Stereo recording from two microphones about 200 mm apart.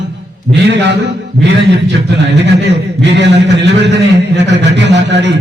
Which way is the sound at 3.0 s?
60° right (ahead or behind).